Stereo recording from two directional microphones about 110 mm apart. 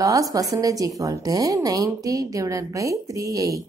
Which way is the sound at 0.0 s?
30° right (ahead or behind).